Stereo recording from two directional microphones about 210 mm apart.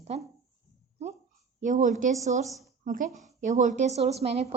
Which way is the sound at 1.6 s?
35° right (ahead or behind).